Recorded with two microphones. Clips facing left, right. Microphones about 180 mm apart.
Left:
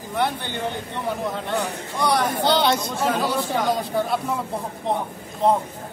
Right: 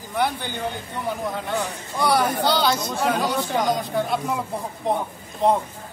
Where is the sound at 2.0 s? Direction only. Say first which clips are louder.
Right 1 dB; centre (ahead or behind).